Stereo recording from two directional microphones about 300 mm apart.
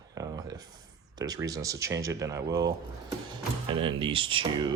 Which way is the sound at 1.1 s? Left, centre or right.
Centre.